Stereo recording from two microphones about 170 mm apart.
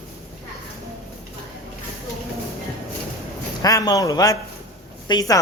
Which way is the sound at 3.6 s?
20° left (ahead or behind).